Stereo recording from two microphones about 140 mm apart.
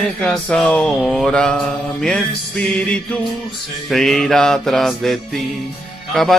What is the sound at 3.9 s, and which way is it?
Mantra, 5° left (ahead or behind).